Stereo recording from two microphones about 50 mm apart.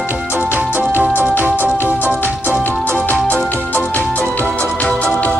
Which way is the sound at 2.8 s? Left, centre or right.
Left.